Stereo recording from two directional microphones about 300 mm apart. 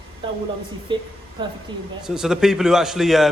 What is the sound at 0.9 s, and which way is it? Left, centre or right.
Speech, centre.